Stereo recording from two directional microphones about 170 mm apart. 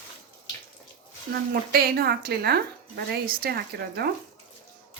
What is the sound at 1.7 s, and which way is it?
A woman's voice, 65° right (ahead or behind).